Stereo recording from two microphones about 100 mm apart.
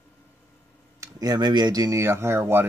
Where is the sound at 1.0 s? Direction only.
40° right (ahead or behind); by 2.6 s 25° right (ahead or behind).